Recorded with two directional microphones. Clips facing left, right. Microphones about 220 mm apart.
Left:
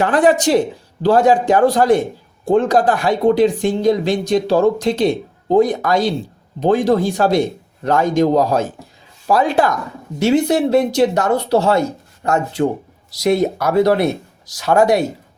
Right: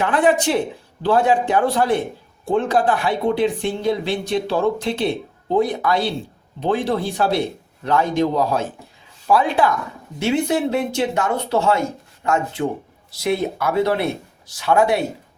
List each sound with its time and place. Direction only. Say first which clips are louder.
0.0 s speech: left 4 dB; 40° left (ahead or behind)